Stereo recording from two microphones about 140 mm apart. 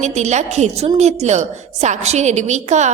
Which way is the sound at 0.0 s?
55° right (ahead or behind).